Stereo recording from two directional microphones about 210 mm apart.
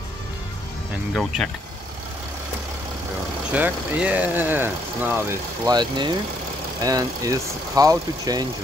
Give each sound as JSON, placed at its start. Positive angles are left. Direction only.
{"t": 3.5, "sound": "speech", "side_deg": -5}
{"t": 5.7, "sound": "speech", "side_deg": -20}